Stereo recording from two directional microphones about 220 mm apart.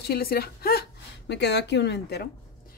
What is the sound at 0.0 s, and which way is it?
Speech, 45° left (ahead or behind).